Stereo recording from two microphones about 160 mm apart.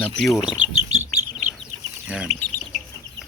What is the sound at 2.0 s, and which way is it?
Speech, 5° right (ahead or behind).